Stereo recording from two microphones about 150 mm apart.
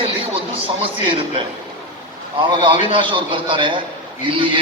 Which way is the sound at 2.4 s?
35° right (ahead or behind).